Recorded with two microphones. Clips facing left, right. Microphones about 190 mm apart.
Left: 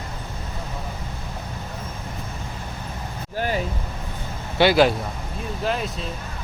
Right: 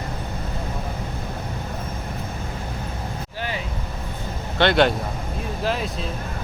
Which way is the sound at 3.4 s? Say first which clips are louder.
Left 6 dB; 45° left (ahead or behind).